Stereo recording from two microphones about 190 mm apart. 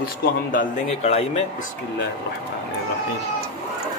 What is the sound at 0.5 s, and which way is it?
Speech, 35° left (ahead or behind).